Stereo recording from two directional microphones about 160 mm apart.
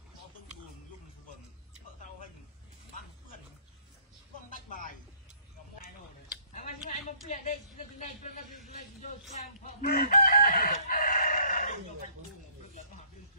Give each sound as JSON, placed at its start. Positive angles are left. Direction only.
{"t": 4.5, "sound": "music", "side_deg": 55}
{"t": 6.5, "sound": "a sound", "side_deg": 50}
{"t": 9.8, "sound": "chicken", "side_deg": 60}